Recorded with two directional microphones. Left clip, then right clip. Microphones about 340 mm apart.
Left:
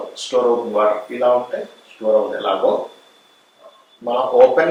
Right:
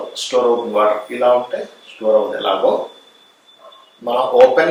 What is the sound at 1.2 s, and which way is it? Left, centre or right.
Speech, left.